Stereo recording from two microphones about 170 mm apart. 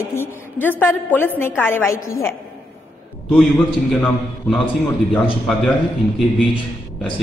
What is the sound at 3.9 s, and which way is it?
Speech, 5° left (ahead or behind).